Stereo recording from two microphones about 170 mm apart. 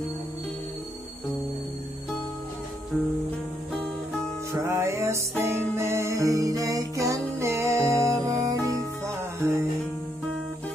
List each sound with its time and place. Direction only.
4.5 s music: 15° right (ahead or behind)